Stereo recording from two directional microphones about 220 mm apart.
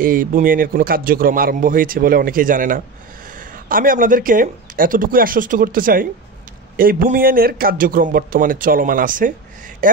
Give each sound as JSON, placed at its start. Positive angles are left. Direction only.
{"t": 0.0, "sound": "a man's voice", "side_deg": -40}